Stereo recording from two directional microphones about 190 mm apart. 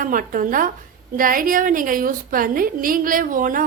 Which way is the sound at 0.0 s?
45° right (ahead or behind).